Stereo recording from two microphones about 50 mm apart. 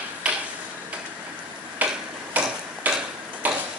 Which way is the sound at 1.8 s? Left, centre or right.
Right.